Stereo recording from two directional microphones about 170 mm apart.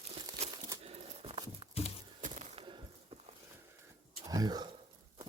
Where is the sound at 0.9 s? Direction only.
35° right (ahead or behind).